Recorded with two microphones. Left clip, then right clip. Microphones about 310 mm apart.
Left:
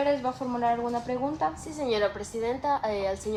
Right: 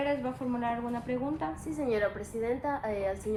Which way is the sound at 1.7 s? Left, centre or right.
Left.